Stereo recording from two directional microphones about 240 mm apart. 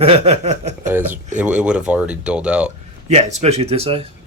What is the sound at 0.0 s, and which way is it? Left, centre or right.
Speech, right.